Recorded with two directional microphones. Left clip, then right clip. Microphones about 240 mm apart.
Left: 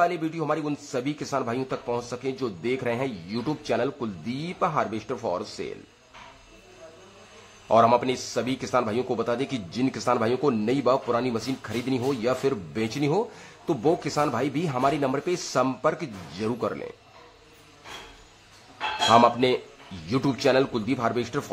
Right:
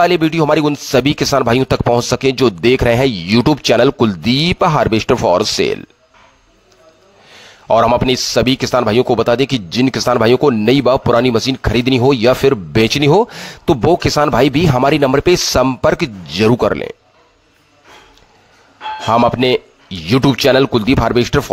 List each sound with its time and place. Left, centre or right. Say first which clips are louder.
0.0 s a man's voice: right 13 dB; right
7.6 s a man's voice: right 8 dB; right
19.0 s a man's voice: right 6 dB; right